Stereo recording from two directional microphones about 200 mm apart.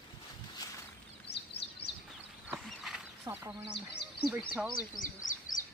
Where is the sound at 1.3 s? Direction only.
55° left (ahead or behind).